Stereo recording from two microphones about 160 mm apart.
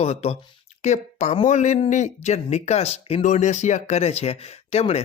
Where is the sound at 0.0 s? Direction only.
40° left (ahead or behind).